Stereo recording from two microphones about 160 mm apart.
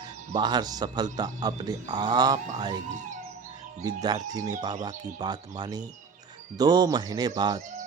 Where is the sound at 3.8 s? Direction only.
25° right (ahead or behind).